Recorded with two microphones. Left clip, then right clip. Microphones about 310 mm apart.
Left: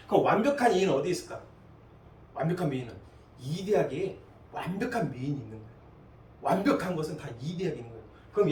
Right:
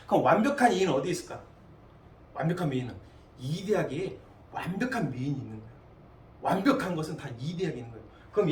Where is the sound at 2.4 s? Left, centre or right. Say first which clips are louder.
Even; centre.